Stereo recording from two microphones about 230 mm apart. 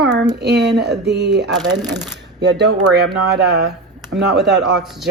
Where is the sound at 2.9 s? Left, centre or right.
Right.